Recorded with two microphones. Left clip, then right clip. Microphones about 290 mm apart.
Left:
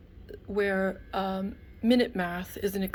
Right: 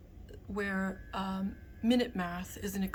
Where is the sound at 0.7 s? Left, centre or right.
Centre.